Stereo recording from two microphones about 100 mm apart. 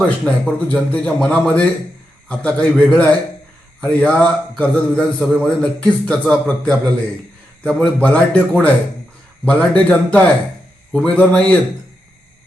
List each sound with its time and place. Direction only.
0.0 s a man's voice: 10° left (ahead or behind)